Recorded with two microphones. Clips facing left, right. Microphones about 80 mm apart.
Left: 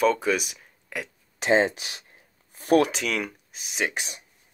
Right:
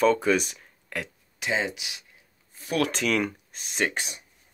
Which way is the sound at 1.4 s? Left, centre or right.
Left.